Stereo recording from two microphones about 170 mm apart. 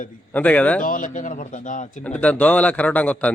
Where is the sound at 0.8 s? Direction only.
50° left (ahead or behind).